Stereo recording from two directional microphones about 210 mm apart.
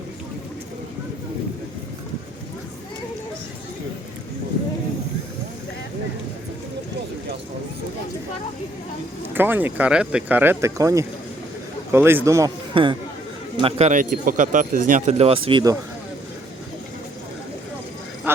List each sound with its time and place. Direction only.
9.3 s speech: 10° right (ahead or behind)